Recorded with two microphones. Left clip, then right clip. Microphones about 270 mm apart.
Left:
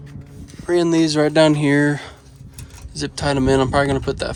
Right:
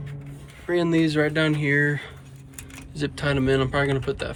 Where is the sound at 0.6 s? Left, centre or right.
Centre.